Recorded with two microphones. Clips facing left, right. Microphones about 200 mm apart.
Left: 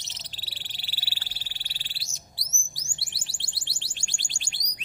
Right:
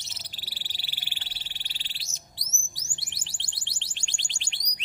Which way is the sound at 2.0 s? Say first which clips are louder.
Left 1 dB; 20° right (ahead or behind).